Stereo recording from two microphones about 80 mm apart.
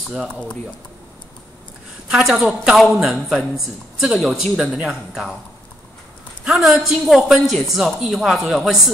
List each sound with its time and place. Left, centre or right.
0.3 s speech: centre
2.0 s a woman's voice: centre
6.4 s a woman's voice: centre